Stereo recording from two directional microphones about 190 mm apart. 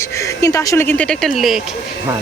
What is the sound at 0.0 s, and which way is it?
Speech, 15° left (ahead or behind).